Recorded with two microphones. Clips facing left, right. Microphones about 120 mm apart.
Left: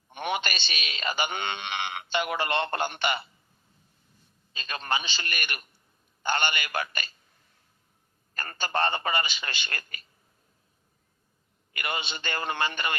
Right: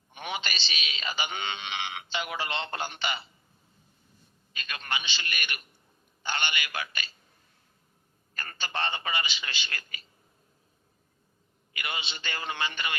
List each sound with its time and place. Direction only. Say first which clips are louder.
0.1 s a man's voice: left 5 dB; 55° left (ahead or behind)
4.5 s a man's voice: left 5 dB; 35° left (ahead or behind)
8.4 s a man's voice: left 6 dB; 45° left (ahead or behind)
11.7 s a man's voice: left 4 dB; 50° left (ahead or behind)